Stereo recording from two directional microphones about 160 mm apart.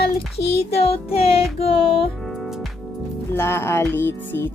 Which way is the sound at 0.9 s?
40° left (ahead or behind).